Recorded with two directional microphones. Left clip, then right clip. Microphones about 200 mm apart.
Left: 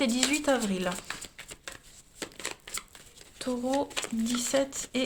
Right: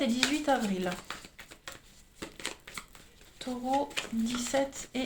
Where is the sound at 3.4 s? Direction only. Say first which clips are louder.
Left 1 dB; 45° left (ahead or behind).